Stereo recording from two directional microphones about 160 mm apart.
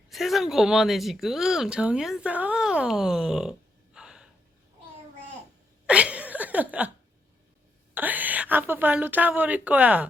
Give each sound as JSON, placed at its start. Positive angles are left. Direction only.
{"t": 0.1, "sound": "a woman's voice", "side_deg": 0}
{"t": 3.9, "sound": "gasp", "side_deg": -5}
{"t": 5.8, "sound": "a sound", "side_deg": -5}
{"t": 7.9, "sound": "a woman's voice", "side_deg": -10}